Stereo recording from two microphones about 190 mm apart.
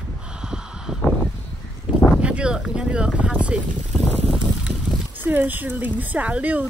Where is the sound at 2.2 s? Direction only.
5° right (ahead or behind).